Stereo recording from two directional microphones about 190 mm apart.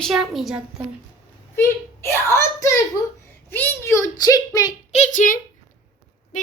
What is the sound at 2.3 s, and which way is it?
A child's voice, 15° left (ahead or behind).